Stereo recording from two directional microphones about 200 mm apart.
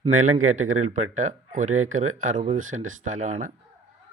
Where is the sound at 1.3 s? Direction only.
40° right (ahead or behind).